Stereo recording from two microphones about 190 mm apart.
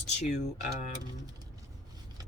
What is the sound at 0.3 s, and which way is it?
Speech, 40° left (ahead or behind).